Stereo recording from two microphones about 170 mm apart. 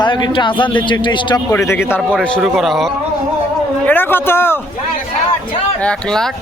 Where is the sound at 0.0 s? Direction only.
25° left (ahead or behind).